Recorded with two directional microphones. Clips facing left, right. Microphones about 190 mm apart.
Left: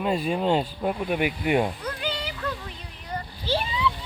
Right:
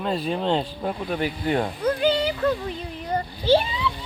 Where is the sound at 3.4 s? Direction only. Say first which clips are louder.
Right 6 dB; 30° right (ahead or behind).